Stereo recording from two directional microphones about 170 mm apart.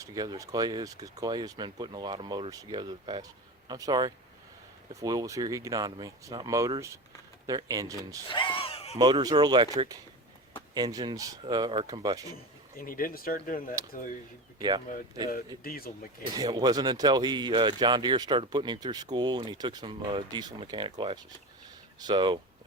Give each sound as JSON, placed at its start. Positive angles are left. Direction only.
{"t": 0.0, "sound": "speech", "side_deg": -20}
{"t": 8.3, "sound": "speech", "side_deg": 30}
{"t": 9.0, "sound": "speech", "side_deg": -25}
{"t": 12.7, "sound": "speech", "side_deg": 55}
{"t": 15.6, "sound": "speech", "side_deg": 60}
{"t": 16.3, "sound": "speech", "side_deg": -25}
{"t": 21.9, "sound": "speech", "side_deg": -25}